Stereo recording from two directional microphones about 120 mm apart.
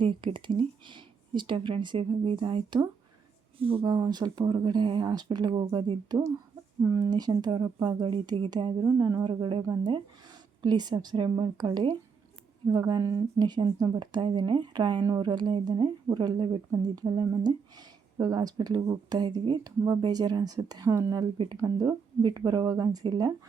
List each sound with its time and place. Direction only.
0.0 s speech: 45° right (ahead or behind)
3.8 s speech: 35° right (ahead or behind)